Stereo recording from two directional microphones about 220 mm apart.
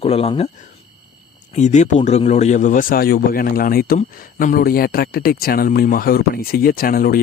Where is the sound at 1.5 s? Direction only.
30° left (ahead or behind).